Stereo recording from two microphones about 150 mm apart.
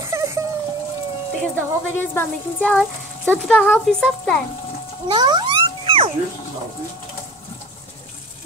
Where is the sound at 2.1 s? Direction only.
15° left (ahead or behind).